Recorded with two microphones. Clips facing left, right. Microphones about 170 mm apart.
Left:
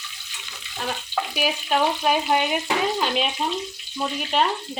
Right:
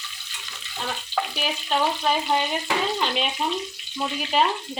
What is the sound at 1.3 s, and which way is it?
Frying, 5° left (ahead or behind).